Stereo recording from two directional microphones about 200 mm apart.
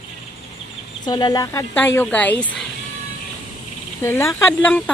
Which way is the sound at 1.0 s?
20° left (ahead or behind).